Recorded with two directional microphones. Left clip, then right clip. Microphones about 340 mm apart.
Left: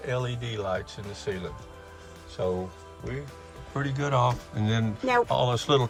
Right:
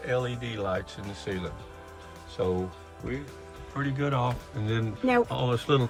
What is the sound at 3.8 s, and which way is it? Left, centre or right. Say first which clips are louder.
Speech: left 3 dB; centre.